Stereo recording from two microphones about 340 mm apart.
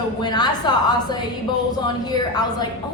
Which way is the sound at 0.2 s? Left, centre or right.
Centre.